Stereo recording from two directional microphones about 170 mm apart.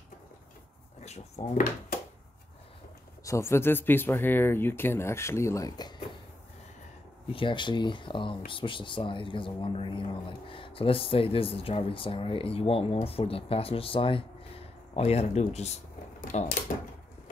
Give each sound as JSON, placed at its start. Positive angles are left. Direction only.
{"t": 1.0, "sound": "speech", "side_deg": 40}
{"t": 3.3, "sound": "speech", "side_deg": 15}
{"t": 7.2, "sound": "speech", "side_deg": 30}
{"t": 16.3, "sound": "speech", "side_deg": 50}